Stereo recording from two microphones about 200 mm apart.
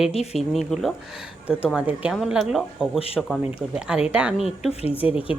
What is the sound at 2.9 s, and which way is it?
Speech, 30° left (ahead or behind).